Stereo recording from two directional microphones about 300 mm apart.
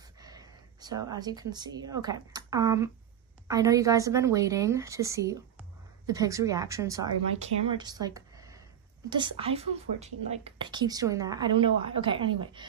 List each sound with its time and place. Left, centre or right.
0.2 s a woman's voice: centre